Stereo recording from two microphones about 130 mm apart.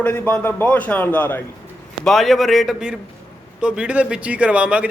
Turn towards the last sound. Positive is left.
turn(degrees=-10)  # may be behind; listen again after turning